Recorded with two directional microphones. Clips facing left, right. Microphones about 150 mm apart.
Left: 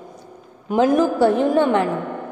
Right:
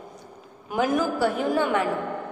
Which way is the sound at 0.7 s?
25° left (ahead or behind).